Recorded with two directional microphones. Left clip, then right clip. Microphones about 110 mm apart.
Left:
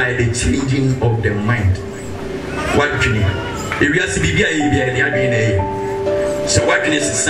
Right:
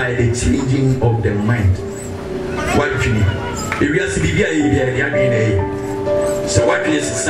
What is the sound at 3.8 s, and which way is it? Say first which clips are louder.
Speech: left 3 dB; 20° left (ahead or behind).